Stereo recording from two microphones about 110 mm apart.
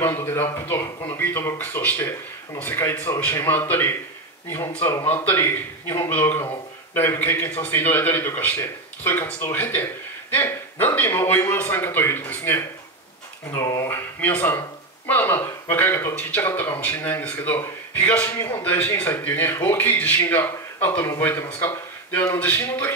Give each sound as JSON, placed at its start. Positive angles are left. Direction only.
{"t": 0.0, "sound": "a man's voice", "side_deg": 20}
{"t": 13.8, "sound": "a man's voice", "side_deg": 20}